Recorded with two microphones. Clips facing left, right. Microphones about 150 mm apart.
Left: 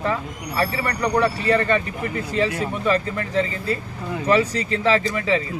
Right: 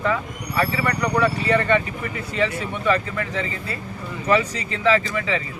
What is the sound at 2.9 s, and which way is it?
Speech, 35° left (ahead or behind).